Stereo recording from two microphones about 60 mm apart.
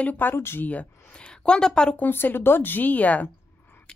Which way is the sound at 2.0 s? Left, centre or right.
Left.